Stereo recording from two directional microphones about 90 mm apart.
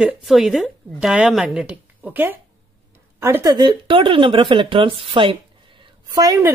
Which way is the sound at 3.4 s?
55° right (ahead or behind).